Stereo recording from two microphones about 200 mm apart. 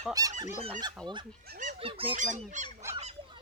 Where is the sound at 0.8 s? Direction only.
20° right (ahead or behind).